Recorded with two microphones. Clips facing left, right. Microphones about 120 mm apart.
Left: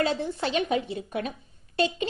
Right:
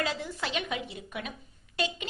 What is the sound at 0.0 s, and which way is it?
A woman's voice, 30° left (ahead or behind).